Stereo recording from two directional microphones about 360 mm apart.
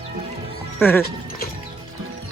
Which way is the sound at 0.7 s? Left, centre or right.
Centre.